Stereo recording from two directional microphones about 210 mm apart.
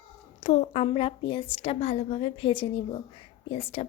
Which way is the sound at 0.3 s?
30° left (ahead or behind).